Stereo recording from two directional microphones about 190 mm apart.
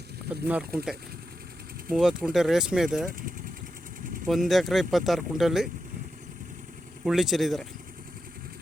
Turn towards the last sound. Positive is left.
turn(degrees=0)  # may be behind; listen again after turning